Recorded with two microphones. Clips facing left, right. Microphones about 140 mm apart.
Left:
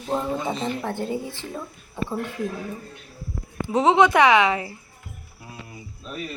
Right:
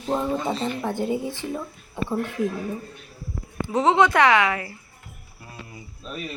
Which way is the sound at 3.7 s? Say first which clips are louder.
Left 1 dB; 20° left (ahead or behind).